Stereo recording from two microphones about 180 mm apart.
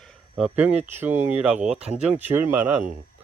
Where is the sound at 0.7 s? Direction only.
35° right (ahead or behind).